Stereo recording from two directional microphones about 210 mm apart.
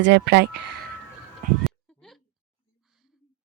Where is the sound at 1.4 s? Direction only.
40° right (ahead or behind).